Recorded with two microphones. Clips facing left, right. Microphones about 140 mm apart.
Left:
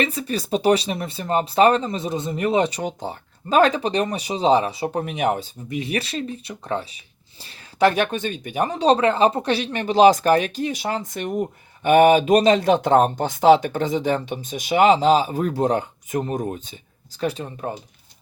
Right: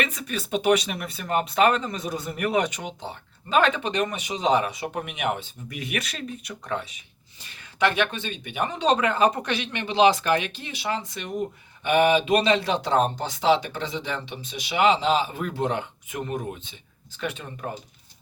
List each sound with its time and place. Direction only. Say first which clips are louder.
0.0 s speech: left 5 dB; 30° left (ahead or behind)
5.6 s speech: left 6 dB; 25° left (ahead or behind)